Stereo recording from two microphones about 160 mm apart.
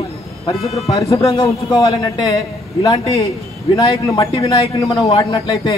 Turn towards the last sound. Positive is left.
turn(degrees=25)  # may be behind; listen again after turning